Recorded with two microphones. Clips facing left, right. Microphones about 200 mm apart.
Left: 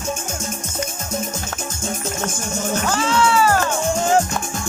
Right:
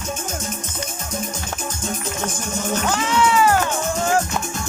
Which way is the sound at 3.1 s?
15° right (ahead or behind).